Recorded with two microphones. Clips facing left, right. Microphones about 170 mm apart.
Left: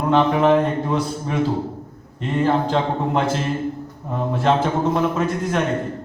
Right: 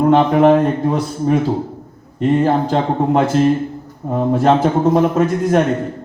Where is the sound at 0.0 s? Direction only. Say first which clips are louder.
Right 5 dB; 45° right (ahead or behind).